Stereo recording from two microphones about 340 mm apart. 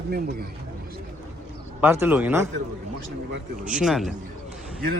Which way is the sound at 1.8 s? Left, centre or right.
Centre.